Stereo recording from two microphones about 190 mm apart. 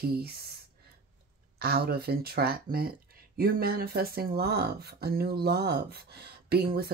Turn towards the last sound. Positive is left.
turn(degrees=-55)  # may be behind; listen again after turning